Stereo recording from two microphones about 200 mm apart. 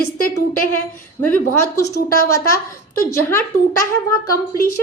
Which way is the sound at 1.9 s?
50° left (ahead or behind).